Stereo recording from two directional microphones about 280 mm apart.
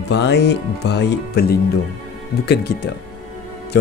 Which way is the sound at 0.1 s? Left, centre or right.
Left.